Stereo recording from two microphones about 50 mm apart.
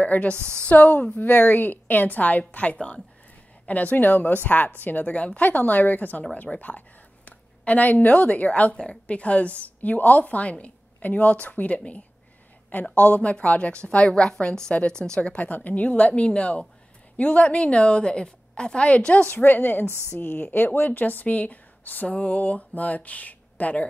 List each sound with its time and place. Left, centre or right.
0.0 s a woman's voice: left
15.3 s a woman's voice: left
19.3 s a woman's voice: left